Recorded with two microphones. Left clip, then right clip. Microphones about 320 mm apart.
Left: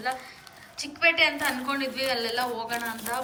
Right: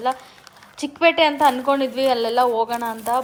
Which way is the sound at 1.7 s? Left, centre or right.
Right.